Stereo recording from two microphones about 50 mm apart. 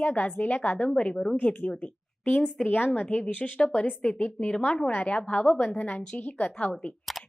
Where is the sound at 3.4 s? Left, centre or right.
Centre.